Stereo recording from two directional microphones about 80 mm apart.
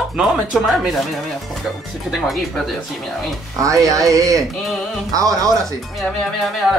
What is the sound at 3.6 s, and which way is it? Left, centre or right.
Speech, right.